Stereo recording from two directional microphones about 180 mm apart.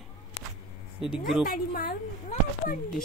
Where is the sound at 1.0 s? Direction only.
Centre (ahead or behind).